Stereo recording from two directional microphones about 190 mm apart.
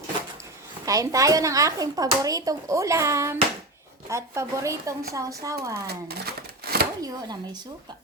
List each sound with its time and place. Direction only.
0.9 s a child's voice: 15° right (ahead or behind)
5.9 s a sound: 55° right (ahead or behind)
7.0 s speech: 20° right (ahead or behind)